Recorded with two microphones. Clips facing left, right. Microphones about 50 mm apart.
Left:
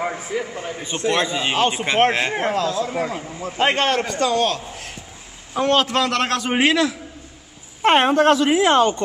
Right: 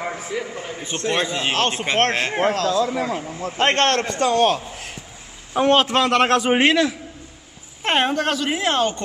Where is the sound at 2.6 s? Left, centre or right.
Right.